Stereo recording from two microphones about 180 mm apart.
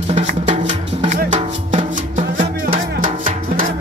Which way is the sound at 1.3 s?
25° right (ahead or behind).